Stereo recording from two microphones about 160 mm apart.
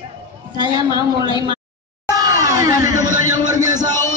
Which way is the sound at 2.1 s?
20° right (ahead or behind).